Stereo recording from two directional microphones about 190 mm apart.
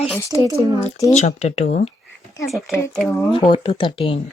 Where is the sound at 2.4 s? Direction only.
Centre (ahead or behind).